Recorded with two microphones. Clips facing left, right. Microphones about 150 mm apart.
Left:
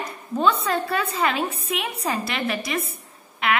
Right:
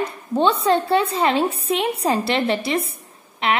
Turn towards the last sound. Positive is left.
turn(degrees=-25)  # may be behind; listen again after turning